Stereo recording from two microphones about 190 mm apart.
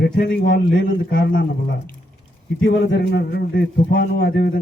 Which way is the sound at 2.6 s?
75° left (ahead or behind).